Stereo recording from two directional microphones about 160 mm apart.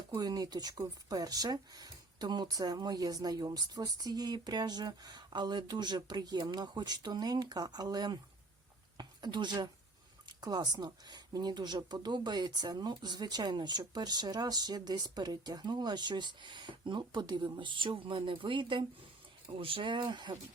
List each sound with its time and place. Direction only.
0.1 s speech: 25° right (ahead or behind)